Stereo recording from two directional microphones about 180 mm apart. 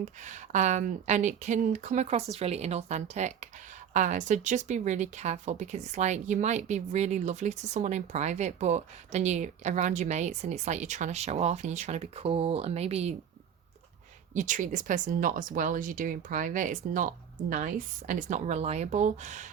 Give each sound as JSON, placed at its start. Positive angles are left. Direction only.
{"t": 0.0, "sound": "speech", "side_deg": -40}
{"t": 14.3, "sound": "speech", "side_deg": -45}